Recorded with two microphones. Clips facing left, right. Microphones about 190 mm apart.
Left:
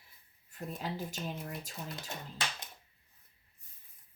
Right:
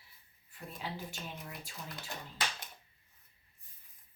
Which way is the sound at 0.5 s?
40° left (ahead or behind).